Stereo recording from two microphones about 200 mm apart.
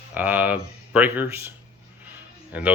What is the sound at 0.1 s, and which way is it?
Speech, 10° right (ahead or behind).